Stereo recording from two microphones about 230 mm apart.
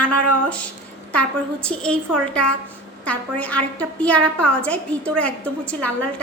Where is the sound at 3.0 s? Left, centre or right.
Centre.